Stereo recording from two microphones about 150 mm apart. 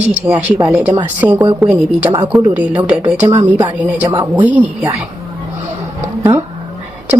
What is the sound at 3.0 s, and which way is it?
Speech, 20° right (ahead or behind).